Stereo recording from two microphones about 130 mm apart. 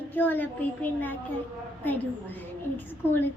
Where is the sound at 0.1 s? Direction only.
15° left (ahead or behind).